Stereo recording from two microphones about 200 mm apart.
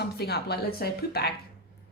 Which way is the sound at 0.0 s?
55° left (ahead or behind).